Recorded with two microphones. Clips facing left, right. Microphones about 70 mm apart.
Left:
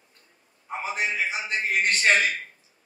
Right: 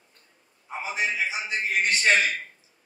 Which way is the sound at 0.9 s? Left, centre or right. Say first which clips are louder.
Even; left.